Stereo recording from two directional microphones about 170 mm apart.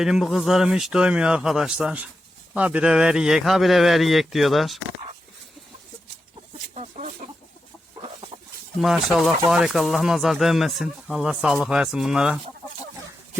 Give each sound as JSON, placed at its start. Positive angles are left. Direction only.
{"t": 0.0, "sound": "speech", "side_deg": -5}
{"t": 6.7, "sound": "chicken", "side_deg": -40}
{"t": 8.8, "sound": "speech", "side_deg": 0}